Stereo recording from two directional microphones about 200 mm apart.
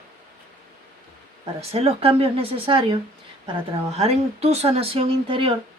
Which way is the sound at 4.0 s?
30° right (ahead or behind).